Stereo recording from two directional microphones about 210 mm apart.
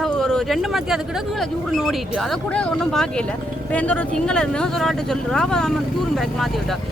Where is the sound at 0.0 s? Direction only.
5° left (ahead or behind).